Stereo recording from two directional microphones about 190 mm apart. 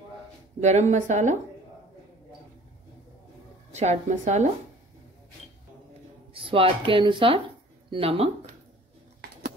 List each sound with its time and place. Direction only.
0.6 s a woman's voice: 35° right (ahead or behind)
3.7 s a woman's voice: 35° right (ahead or behind)
6.3 s speech: 30° right (ahead or behind)